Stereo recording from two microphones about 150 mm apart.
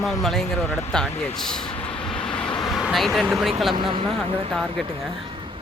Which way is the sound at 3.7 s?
35° right (ahead or behind).